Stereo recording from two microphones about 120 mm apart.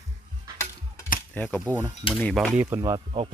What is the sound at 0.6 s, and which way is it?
Mechanisms, 15° left (ahead or behind).